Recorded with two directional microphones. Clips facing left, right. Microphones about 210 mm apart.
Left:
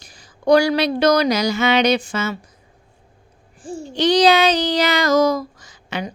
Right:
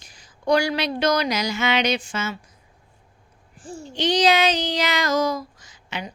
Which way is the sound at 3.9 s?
35° left (ahead or behind).